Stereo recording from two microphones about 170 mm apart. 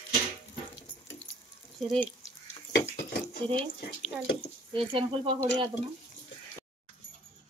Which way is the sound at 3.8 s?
75° left (ahead or behind).